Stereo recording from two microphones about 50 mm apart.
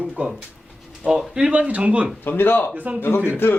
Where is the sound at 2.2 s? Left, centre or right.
Left.